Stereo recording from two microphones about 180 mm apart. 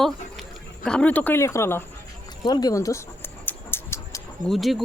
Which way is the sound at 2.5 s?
20° left (ahead or behind).